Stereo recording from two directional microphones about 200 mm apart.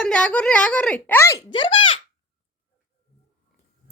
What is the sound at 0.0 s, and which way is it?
Speech, 5° left (ahead or behind).